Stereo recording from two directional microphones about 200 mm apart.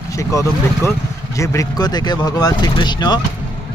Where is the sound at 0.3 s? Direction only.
15° left (ahead or behind).